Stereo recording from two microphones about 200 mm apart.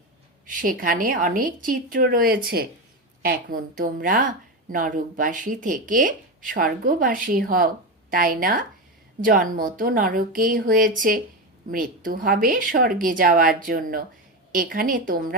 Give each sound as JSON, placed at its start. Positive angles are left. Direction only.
{"t": 0.4, "sound": "a woman's voice", "side_deg": -45}